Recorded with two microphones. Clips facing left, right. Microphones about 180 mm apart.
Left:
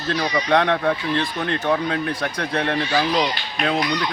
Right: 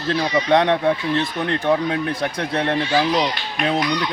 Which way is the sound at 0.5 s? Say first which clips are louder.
Right 2 dB; 20° right (ahead or behind).